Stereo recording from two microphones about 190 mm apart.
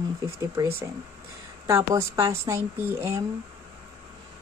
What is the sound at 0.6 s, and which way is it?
A woman's voice, 15° right (ahead or behind).